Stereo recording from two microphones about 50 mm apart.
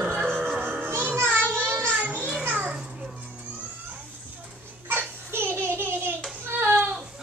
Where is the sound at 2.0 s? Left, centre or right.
Right.